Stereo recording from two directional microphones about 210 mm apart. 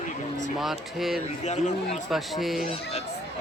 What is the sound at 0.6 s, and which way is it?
Speech, centre (ahead or behind).